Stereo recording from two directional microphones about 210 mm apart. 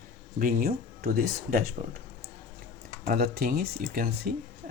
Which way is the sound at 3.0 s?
45° right (ahead or behind).